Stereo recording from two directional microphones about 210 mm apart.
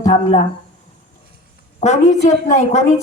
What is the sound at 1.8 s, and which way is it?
Speech, 35° left (ahead or behind).